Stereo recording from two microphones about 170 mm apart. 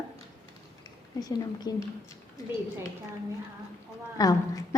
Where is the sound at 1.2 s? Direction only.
25° left (ahead or behind).